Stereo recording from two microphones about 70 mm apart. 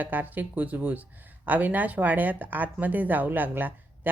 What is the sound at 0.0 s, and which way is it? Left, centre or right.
Speech, right.